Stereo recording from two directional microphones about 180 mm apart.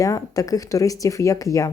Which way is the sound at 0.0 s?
20° left (ahead or behind).